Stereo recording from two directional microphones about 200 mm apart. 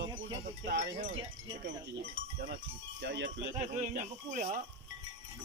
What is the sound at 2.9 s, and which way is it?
Wind chime, 60° right (ahead or behind).